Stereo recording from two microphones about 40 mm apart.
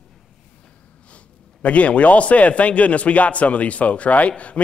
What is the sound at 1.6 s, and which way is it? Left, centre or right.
Speech, left.